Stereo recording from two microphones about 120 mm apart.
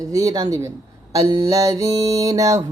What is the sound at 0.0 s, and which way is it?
Mantra, 30° right (ahead or behind).